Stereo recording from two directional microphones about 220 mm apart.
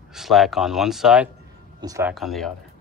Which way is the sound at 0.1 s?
Centre (ahead or behind).